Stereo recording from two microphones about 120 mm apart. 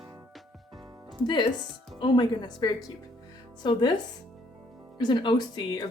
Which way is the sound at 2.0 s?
40° left (ahead or behind).